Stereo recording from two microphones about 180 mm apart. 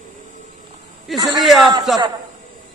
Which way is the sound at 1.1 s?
20° right (ahead or behind).